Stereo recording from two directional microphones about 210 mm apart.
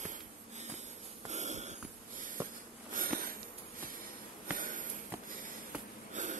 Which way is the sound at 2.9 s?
40° right (ahead or behind).